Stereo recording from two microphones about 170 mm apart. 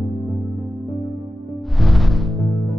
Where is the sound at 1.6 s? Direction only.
Centre (ahead or behind).